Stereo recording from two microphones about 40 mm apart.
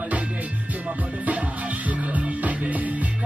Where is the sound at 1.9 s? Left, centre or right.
Right.